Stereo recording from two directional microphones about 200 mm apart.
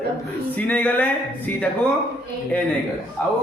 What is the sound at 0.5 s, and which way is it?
Speech, 10° left (ahead or behind).